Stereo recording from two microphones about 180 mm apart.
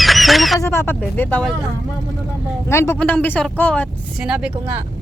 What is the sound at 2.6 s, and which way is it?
Speech, 15° left (ahead or behind).